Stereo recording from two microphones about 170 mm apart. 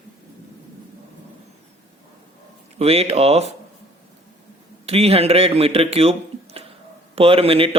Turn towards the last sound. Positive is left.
turn(degrees=-35)  # may be behind; listen again after turning